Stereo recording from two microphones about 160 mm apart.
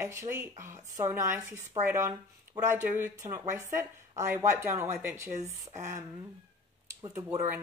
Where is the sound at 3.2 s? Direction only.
15° right (ahead or behind).